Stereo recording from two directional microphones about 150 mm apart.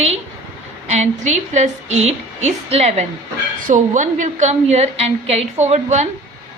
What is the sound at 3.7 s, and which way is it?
A woman's voice, 60° right (ahead or behind).